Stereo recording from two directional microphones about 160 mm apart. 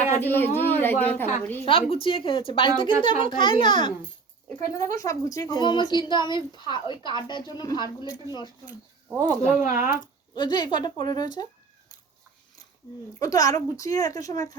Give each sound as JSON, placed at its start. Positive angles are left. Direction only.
{"t": 0.2, "sound": "a woman's voice", "side_deg": 10}
{"t": 1.6, "sound": "speech", "side_deg": 35}
{"t": 4.4, "sound": "a woman's voice", "side_deg": 20}
{"t": 9.6, "sound": "speech", "side_deg": 55}
{"t": 10.3, "sound": "a woman's voice", "side_deg": 25}
{"t": 13.1, "sound": "a woman's voice", "side_deg": 20}